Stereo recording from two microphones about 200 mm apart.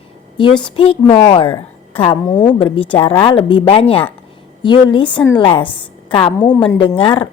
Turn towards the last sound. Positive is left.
turn(degrees=25)  # may be behind; listen again after turning